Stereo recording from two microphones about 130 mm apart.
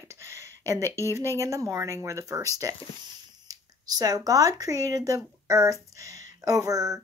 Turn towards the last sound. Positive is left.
turn(degrees=-30)  # may be behind; listen again after turning